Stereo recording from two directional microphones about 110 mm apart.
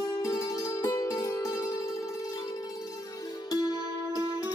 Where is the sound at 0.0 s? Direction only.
30° left (ahead or behind).